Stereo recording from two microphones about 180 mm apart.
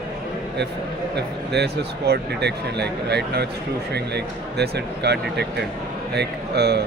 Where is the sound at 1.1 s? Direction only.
65° right (ahead or behind).